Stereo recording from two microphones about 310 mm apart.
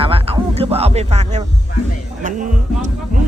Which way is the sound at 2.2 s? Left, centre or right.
Right.